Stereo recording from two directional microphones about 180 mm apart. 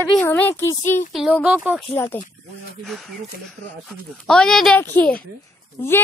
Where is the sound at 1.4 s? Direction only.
5° right (ahead or behind).